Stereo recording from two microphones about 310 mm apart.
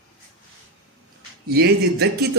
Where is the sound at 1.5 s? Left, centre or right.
Right.